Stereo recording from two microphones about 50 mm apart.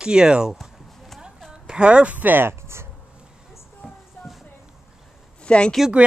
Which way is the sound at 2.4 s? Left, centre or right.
Right.